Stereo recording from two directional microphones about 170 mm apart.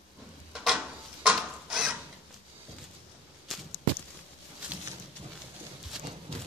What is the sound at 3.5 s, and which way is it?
Walk, centre (ahead or behind).